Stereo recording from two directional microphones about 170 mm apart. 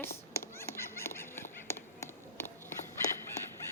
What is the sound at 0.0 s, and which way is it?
Fowl, 15° left (ahead or behind).